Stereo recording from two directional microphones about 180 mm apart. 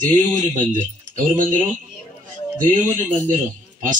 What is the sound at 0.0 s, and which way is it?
Speech, 45° right (ahead or behind).